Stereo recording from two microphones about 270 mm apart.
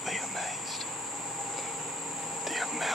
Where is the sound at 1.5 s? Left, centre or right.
Centre.